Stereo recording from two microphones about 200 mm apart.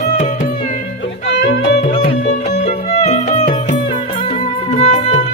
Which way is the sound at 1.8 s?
30° left (ahead or behind).